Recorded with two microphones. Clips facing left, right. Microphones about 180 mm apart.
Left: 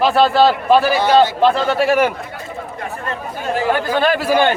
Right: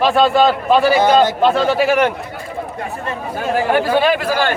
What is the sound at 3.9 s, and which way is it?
Speech, centre (ahead or behind).